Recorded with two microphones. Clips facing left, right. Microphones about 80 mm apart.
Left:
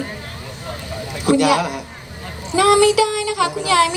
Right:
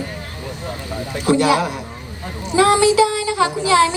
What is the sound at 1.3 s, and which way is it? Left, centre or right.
Child singing, right.